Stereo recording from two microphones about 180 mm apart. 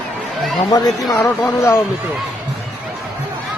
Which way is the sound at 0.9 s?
5° left (ahead or behind).